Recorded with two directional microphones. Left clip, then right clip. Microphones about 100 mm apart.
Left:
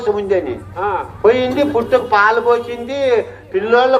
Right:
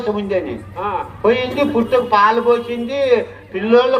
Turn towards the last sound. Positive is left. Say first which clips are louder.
# left 1 dB
turn(degrees=30)  # may be behind; listen again after turning